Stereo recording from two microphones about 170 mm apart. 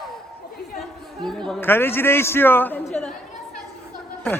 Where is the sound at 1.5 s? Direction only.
10° left (ahead or behind).